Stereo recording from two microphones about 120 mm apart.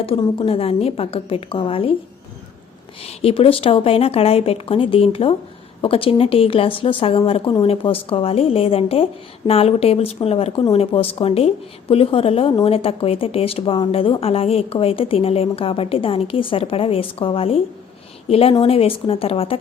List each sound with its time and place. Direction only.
0.0 s a woman's voice: 50° left (ahead or behind)
3.0 s a woman's voice: 55° left (ahead or behind)